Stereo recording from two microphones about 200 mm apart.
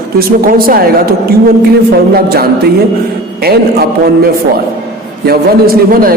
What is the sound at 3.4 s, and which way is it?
Speech, 50° right (ahead or behind).